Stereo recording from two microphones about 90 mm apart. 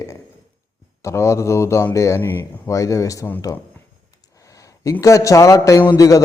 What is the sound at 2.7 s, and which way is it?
Speech, 35° left (ahead or behind).